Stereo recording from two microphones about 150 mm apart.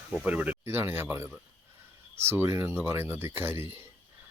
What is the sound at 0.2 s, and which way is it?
Speech, 10° right (ahead or behind).